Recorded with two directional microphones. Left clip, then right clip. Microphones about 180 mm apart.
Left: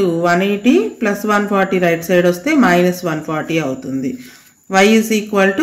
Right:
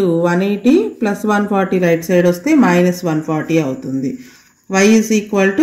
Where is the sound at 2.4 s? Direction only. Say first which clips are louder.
Even; 35° right (ahead or behind).